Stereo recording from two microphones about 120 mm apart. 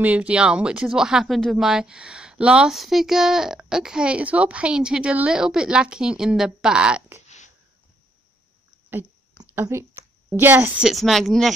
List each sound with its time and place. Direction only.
0.0 s speech: 10° right (ahead or behind)
7.2 s a sound: 80° left
9.6 s speech: 25° right (ahead or behind)
10.8 s speech: centre (ahead or behind)